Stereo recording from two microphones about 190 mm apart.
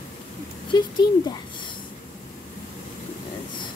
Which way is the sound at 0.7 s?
25° left (ahead or behind).